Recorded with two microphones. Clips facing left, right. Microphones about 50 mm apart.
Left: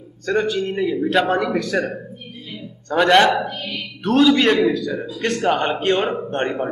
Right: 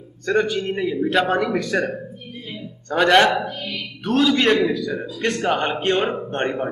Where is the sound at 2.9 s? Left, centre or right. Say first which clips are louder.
Left 1 dB; centre.